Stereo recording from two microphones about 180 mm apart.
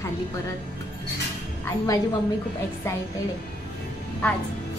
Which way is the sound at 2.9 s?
15° left (ahead or behind).